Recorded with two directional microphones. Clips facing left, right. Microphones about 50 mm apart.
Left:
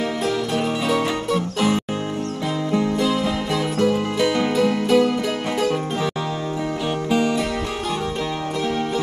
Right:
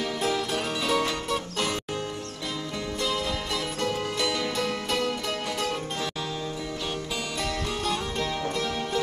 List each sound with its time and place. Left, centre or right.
0.2 s music: centre
3.0 s music: centre
7.1 s music: left
8.6 s music: centre